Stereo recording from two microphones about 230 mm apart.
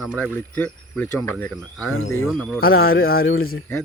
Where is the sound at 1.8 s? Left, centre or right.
Left.